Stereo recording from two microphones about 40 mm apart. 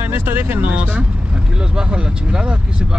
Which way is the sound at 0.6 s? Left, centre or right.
Right.